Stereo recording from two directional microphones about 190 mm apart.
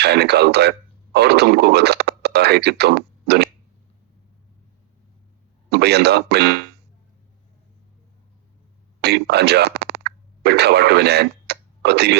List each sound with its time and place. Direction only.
0.0 s speech: 60° right (ahead or behind)
5.7 s speech: 60° right (ahead or behind)
9.0 s a sound: 60° right (ahead or behind)